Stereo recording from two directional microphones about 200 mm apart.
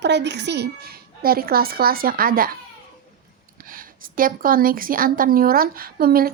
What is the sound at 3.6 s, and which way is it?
A woman's voice, 45° right (ahead or behind).